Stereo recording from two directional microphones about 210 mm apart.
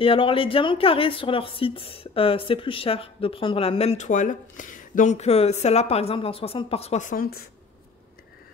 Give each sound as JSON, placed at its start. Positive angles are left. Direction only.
{"t": 0.0, "sound": "speech", "side_deg": 25}